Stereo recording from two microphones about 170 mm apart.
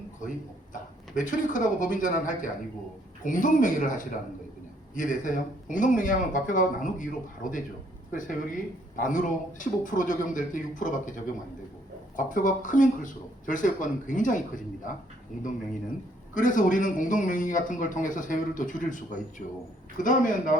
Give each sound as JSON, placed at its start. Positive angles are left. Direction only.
{"t": 0.7, "sound": "a man's voice", "side_deg": 50}
{"t": 16.3, "sound": "a man's voice", "side_deg": 50}